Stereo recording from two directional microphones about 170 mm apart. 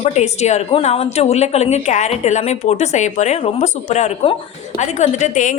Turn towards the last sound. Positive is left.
turn(degrees=45)  # may be behind; listen again after turning